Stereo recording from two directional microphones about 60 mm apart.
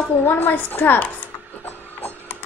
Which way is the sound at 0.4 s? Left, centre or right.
Left.